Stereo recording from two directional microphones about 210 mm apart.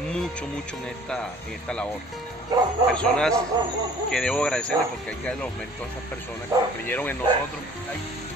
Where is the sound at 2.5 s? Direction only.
20° right (ahead or behind).